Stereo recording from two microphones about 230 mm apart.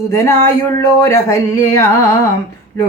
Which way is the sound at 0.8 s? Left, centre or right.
Centre.